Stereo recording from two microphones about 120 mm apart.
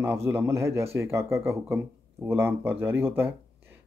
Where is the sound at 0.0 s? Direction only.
20° right (ahead or behind).